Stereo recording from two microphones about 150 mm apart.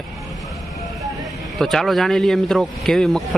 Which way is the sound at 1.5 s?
Centre (ahead or behind).